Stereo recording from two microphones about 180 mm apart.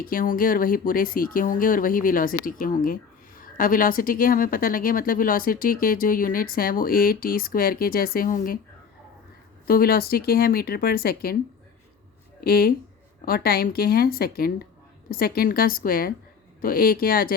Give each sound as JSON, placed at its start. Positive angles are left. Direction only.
{"t": 0.0, "sound": "speech", "side_deg": 50}
{"t": 9.6, "sound": "speech", "side_deg": 55}
{"t": 12.4, "sound": "speech", "side_deg": 55}